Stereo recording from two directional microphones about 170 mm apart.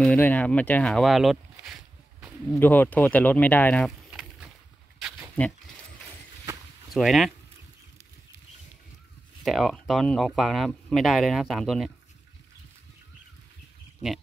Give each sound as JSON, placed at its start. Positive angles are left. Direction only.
{"t": 0.0, "sound": "speech", "side_deg": 10}
{"t": 2.6, "sound": "speech", "side_deg": 10}
{"t": 4.1, "sound": "a sound", "side_deg": -5}
{"t": 5.4, "sound": "speech", "side_deg": 10}
{"t": 6.9, "sound": "speech", "side_deg": 0}
{"t": 9.4, "sound": "speech", "side_deg": 0}